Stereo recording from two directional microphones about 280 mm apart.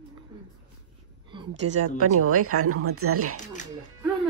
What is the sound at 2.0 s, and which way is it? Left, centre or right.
Speech, right.